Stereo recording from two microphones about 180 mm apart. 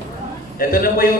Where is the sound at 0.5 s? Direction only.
55° left (ahead or behind).